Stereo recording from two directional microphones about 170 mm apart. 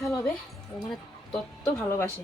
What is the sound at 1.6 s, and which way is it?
Speech, 15° left (ahead or behind).